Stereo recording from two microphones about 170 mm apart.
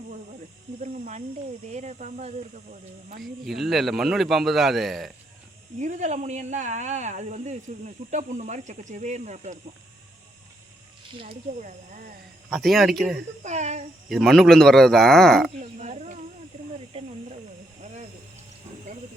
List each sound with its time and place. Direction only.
0.8 s snake: 45° right (ahead or behind)
1.6 s speech: 45° right (ahead or behind)
3.2 s speech: centre (ahead or behind)
5.8 s speech: 45° right (ahead or behind)
11.3 s speech: 50° right (ahead or behind)
12.5 s speech: centre (ahead or behind)
13.4 s speech: 45° right (ahead or behind)
14.1 s speech: centre (ahead or behind)
15.8 s a sound: 40° right (ahead or behind)
16.9 s snake: 35° right (ahead or behind)